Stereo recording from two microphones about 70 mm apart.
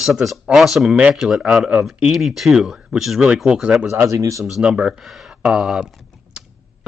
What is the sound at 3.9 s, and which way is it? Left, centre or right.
Speech, right.